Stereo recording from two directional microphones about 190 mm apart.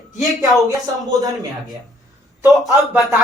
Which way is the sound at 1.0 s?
20° right (ahead or behind).